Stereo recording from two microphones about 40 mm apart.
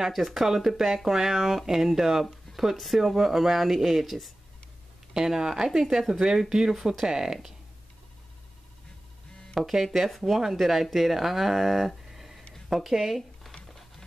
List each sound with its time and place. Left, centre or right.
0.0 s speech: centre
5.1 s speech: centre
9.6 s speech: centre
12.1 s a sound: centre
13.7 s music: centre